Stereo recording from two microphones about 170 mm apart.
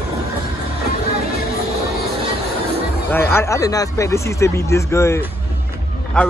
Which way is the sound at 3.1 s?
15° left (ahead or behind).